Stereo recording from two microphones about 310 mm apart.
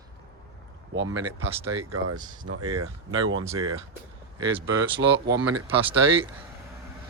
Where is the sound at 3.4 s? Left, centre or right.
Centre.